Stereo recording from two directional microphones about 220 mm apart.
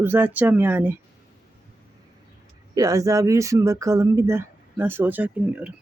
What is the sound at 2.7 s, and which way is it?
Speech, 15° right (ahead or behind).